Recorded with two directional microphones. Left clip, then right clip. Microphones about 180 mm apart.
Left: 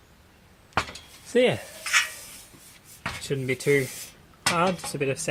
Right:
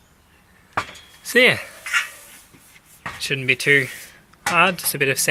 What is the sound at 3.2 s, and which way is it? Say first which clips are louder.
Speech: right 10 dB; 15° left (ahead or behind).